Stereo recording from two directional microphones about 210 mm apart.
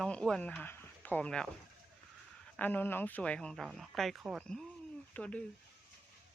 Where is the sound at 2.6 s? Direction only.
10° left (ahead or behind).